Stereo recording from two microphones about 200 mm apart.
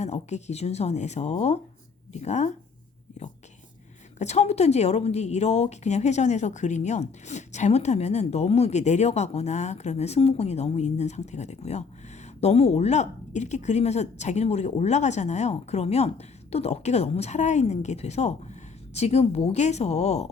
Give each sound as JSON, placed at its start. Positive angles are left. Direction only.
{"t": 0.0, "sound": "a woman's voice", "side_deg": 35}
{"t": 4.2, "sound": "a woman's voice", "side_deg": 35}